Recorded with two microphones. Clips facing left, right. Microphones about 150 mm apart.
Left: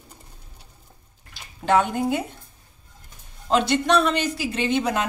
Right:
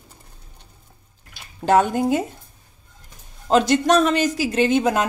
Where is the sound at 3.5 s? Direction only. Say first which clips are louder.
Right 4 dB; 45° right (ahead or behind).